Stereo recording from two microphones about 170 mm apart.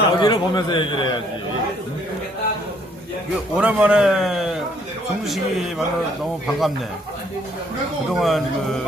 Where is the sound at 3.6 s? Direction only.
5° right (ahead or behind).